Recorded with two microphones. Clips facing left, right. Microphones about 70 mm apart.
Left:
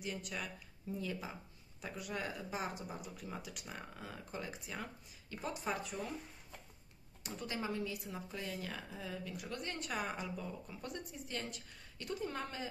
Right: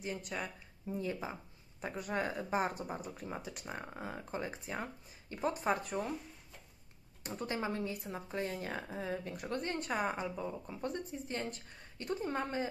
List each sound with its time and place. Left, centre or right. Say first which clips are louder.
0.0 s speech: right 3 dB; right
7.2 s speech: right 4 dB; right